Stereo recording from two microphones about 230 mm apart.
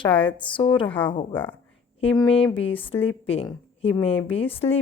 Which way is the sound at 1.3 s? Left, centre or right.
Centre.